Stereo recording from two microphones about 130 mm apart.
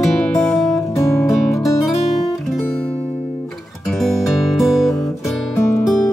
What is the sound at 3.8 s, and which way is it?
Music, centre (ahead or behind).